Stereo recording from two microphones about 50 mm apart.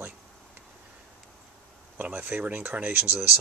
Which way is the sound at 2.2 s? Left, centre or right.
Right.